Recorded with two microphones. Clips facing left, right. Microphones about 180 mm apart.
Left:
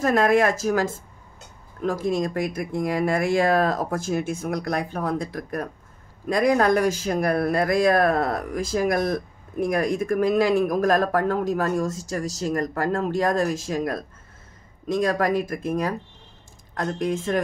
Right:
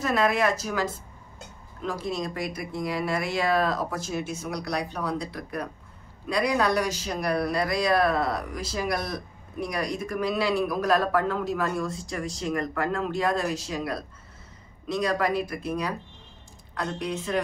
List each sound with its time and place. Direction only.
0.0 s speech: 45° left (ahead or behind)